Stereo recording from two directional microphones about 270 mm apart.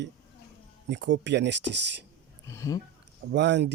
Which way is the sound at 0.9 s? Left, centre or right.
Right.